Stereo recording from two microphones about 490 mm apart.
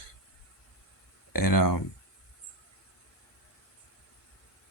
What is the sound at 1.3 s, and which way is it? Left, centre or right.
Speech, left.